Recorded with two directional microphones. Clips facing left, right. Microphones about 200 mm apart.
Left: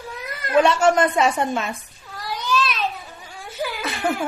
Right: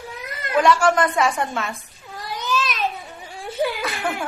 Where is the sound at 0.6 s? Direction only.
25° left (ahead or behind).